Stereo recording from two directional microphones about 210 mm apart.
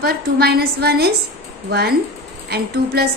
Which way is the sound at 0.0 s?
50° right (ahead or behind).